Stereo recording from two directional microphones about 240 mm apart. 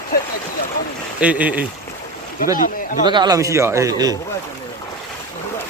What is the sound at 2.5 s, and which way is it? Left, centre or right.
Speech, left.